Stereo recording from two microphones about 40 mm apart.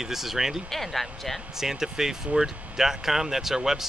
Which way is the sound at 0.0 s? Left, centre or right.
Centre.